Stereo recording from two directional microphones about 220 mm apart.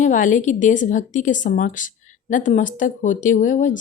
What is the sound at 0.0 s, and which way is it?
Speech, 35° left (ahead or behind).